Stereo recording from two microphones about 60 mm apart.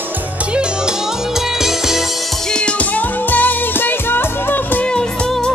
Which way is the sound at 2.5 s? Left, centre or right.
Left.